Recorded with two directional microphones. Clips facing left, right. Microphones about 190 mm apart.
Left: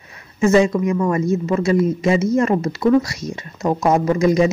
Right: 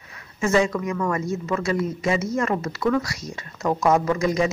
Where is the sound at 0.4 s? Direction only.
25° left (ahead or behind).